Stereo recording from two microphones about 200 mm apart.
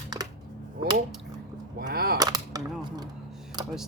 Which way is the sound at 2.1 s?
20° right (ahead or behind).